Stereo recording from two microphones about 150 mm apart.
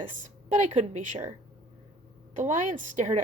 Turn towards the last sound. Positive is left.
turn(degrees=-55)  # may be behind; listen again after turning